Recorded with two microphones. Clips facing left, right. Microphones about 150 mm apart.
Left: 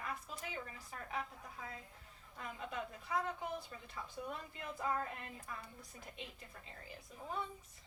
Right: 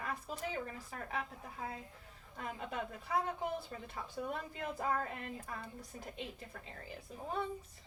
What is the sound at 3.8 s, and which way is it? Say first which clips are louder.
A woman's voice: right 4 dB; 55° right (ahead or behind).